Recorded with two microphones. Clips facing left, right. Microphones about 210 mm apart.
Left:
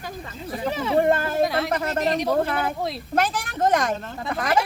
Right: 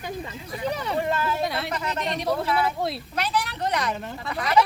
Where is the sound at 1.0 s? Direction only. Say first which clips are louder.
Left 7 dB; 50° left (ahead or behind).